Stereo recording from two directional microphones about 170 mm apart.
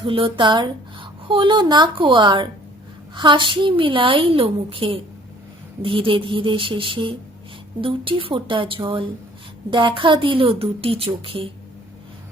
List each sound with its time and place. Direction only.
0.0 s a woman's voice: 30° right (ahead or behind)